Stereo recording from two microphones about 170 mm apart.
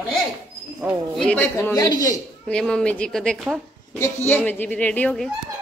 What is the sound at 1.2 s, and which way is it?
Speech, 10° left (ahead or behind).